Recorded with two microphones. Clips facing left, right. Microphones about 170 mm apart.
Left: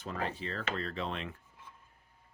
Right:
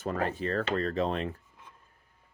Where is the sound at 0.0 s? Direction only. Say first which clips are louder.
Right 7 dB; 50° right (ahead or behind).